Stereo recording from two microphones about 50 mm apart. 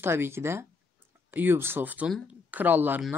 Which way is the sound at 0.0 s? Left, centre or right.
Right.